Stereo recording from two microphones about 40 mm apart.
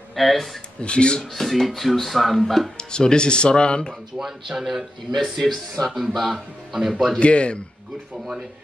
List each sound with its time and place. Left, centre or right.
0.1 s speech: centre
0.7 s speech: left
1.3 s speech: centre
2.8 s speech: centre
4.2 s speech: centre
5.4 s speech: centre
5.9 s speech: centre
7.2 s speech: left